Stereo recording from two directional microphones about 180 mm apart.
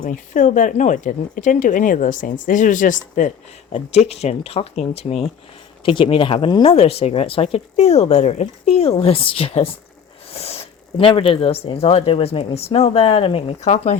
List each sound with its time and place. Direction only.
0.0 s speech: 45° left (ahead or behind)